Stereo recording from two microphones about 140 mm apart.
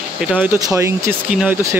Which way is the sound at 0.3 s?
10° right (ahead or behind).